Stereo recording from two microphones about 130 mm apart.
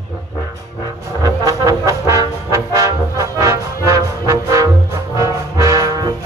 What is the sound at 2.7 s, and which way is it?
Brass instrument, 25° right (ahead or behind).